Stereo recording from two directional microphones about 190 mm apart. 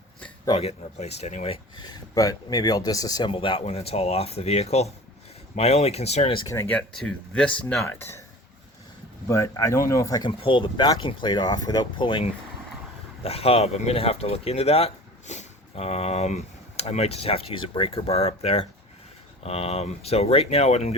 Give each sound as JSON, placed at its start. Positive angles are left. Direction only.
{"t": 0.4, "sound": "speech", "side_deg": 30}
{"t": 1.7, "sound": "speech", "side_deg": 20}
{"t": 6.5, "sound": "speech", "side_deg": 10}
{"t": 9.2, "sound": "speech", "side_deg": 15}